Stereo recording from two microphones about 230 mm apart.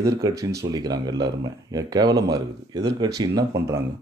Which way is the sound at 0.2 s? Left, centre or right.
Centre.